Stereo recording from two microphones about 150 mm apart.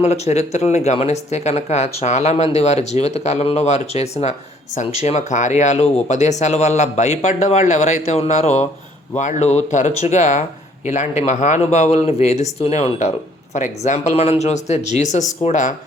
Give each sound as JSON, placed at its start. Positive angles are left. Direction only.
{"t": 0.0, "sound": "speech", "side_deg": 50}